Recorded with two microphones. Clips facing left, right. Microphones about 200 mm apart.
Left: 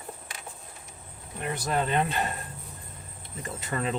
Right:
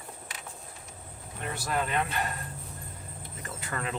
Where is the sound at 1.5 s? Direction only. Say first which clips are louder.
Left 3 dB; 20° left (ahead or behind).